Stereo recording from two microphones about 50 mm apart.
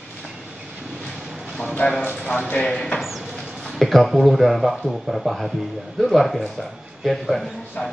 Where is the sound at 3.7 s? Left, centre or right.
Centre.